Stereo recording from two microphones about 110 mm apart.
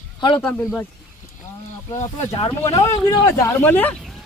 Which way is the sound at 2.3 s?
60° left (ahead or behind).